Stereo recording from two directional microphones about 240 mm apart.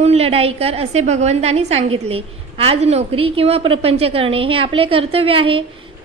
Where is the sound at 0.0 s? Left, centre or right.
Right.